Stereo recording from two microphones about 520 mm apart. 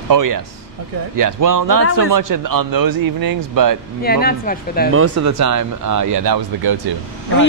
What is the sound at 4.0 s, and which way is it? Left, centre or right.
Speech, centre.